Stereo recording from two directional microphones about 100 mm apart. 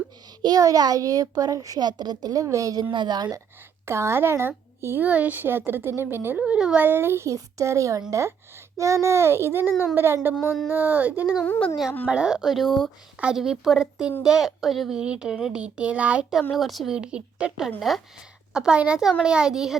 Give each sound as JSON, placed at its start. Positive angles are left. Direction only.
{"t": 0.4, "sound": "a child's voice", "side_deg": -40}
{"t": 2.9, "sound": "speech", "side_deg": -50}
{"t": 3.8, "sound": "speech", "side_deg": -25}
{"t": 6.4, "sound": "speech", "side_deg": -10}
{"t": 6.8, "sound": "speech", "side_deg": -20}
{"t": 11.4, "sound": "speech", "side_deg": 20}
{"t": 12.0, "sound": "speech", "side_deg": -10}
{"t": 16.5, "sound": "speech", "side_deg": 0}